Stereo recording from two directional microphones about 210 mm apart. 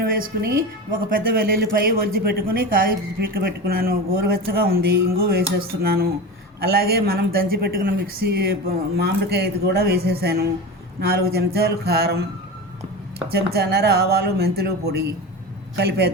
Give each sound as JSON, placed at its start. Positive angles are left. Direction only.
{"t": 0.0, "sound": "speech", "side_deg": -45}
{"t": 13.2, "sound": "speech", "side_deg": -50}